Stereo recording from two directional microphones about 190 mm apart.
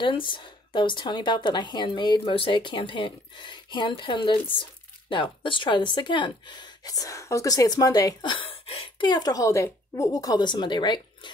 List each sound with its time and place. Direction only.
0.0 s speech: 25° left (ahead or behind)